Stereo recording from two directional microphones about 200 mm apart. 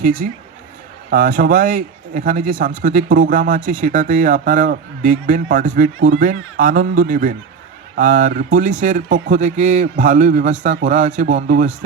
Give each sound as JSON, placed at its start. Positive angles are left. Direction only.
{"t": 0.0, "sound": "speech", "side_deg": -45}